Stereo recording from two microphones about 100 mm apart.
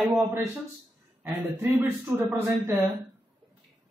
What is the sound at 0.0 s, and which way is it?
A man's voice, 15° right (ahead or behind).